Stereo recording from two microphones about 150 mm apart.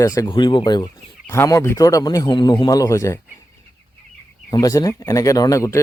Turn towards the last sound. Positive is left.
turn(degrees=20)  # may be behind; listen again after turning